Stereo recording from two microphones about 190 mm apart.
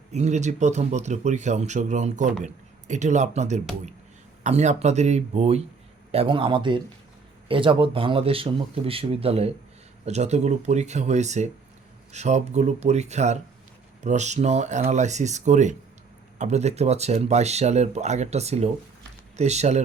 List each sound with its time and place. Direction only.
0.1 s speech: 35° right (ahead or behind)